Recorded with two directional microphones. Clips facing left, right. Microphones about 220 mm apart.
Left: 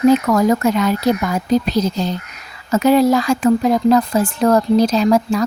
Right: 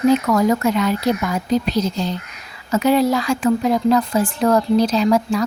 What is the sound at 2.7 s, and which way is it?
Speech, 45° left (ahead or behind).